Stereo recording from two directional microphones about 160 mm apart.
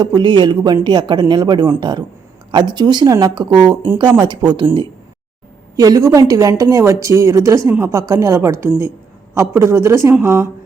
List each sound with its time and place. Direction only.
0.0 s a man's voice: 25° right (ahead or behind)